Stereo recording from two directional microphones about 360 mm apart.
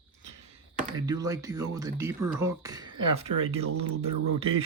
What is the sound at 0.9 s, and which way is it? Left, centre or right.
Speech, centre.